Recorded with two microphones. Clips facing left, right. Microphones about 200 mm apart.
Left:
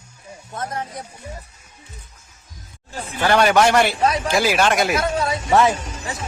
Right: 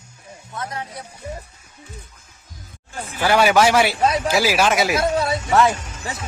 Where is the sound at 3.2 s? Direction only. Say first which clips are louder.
Even; 5° right (ahead or behind).